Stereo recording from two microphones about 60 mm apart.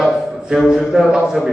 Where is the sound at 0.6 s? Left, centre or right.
Centre.